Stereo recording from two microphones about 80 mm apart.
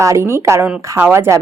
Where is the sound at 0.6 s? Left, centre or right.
Centre.